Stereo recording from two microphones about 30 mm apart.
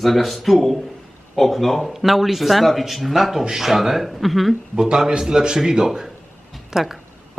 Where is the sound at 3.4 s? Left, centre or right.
Centre.